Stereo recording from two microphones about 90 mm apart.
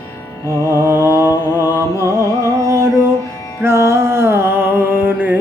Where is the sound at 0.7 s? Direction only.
25° right (ahead or behind).